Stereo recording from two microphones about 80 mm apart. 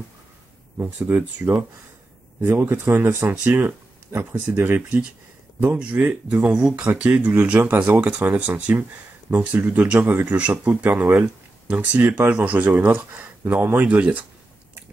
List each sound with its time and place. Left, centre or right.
0.9 s speech: right